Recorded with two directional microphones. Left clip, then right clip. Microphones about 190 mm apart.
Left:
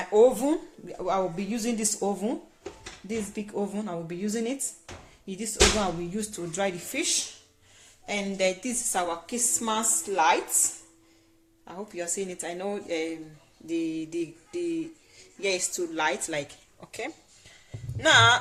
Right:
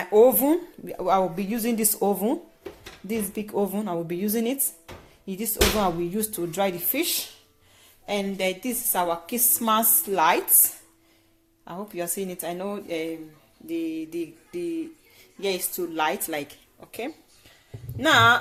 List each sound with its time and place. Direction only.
0.0 s speech: 30° right (ahead or behind); by 1.5 s 50° right (ahead or behind)
1.5 s speech: 30° right (ahead or behind)
9.3 s a sound: 45° right (ahead or behind)
11.7 s speech: 30° right (ahead or behind)
13.7 s a sound: 10° right (ahead or behind)
16.0 s speech: 25° right (ahead or behind)
18.0 s speech: 20° right (ahead or behind)